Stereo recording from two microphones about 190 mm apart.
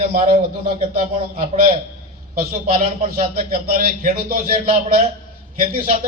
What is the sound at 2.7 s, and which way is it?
A man's voice, 50° right (ahead or behind).